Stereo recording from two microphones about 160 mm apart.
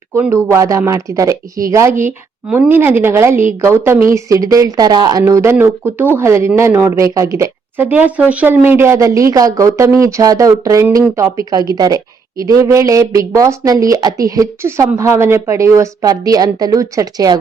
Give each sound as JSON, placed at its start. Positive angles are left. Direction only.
{"t": 0.1, "sound": "a woman's voice", "side_deg": -15}